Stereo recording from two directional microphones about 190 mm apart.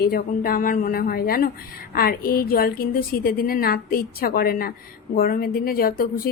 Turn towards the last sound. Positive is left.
turn(degrees=50)  # may be behind; listen again after turning